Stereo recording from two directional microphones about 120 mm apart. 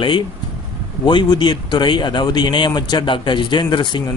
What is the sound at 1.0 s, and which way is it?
A man's voice, 40° left (ahead or behind).